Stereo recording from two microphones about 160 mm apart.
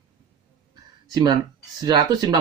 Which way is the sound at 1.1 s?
25° right (ahead or behind).